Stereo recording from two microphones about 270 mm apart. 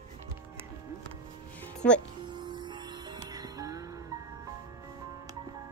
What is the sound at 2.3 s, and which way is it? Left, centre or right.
Music, centre.